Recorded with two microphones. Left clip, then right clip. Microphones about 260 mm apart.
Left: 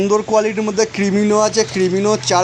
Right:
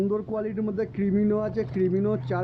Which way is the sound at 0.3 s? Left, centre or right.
Centre.